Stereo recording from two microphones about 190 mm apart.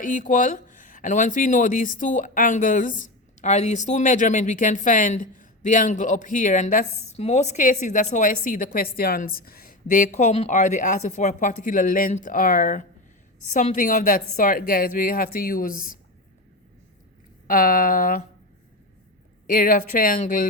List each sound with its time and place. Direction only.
0.0 s speech: 45° left (ahead or behind)
17.4 s speech: 45° left (ahead or behind)
19.5 s speech: 45° left (ahead or behind)